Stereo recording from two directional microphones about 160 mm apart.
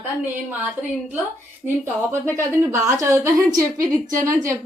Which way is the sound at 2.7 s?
20° right (ahead or behind).